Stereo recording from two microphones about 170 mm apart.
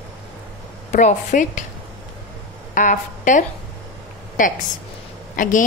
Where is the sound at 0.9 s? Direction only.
45° left (ahead or behind).